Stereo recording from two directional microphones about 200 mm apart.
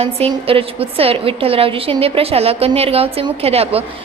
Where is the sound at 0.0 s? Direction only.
30° right (ahead or behind).